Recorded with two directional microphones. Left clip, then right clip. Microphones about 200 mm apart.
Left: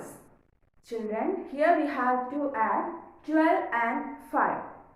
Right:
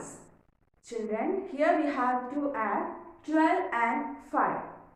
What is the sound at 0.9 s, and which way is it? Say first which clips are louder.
A woman's voice: left 1 dB; 20° left (ahead or behind).